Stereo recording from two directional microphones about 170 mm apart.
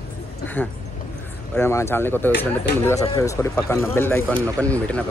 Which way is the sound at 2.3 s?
75° left (ahead or behind).